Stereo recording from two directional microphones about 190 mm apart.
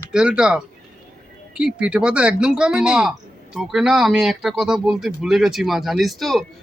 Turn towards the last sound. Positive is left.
turn(degrees=0)  # may be behind; listen again after turning